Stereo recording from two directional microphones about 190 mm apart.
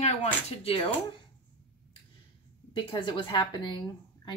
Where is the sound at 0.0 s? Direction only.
35° left (ahead or behind).